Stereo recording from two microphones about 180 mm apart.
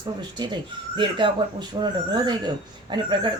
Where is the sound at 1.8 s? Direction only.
25° right (ahead or behind).